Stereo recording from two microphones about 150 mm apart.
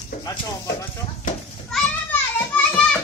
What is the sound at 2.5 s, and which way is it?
Music, 10° left (ahead or behind).